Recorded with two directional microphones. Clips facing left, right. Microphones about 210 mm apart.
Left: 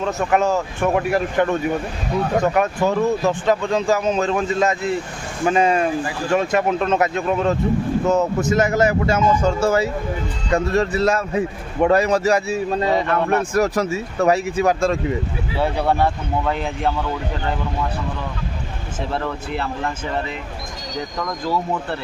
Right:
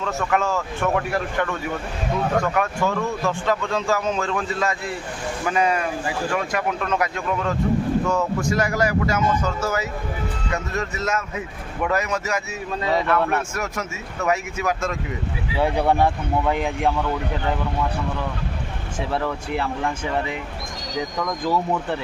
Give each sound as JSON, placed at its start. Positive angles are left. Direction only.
{"t": 0.0, "sound": "a man's voice", "side_deg": 20}
{"t": 15.5, "sound": "speech", "side_deg": -15}
{"t": 19.1, "sound": "speech", "side_deg": -10}